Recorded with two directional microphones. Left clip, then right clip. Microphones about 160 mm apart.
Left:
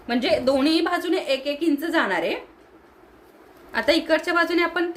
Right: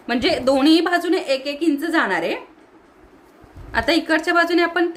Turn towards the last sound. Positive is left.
turn(degrees=-35)  # may be behind; listen again after turning